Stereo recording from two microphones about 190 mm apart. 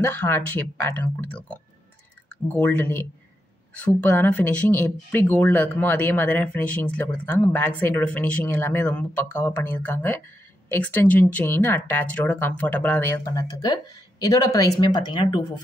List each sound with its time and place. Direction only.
0.0 s speech: 10° left (ahead or behind)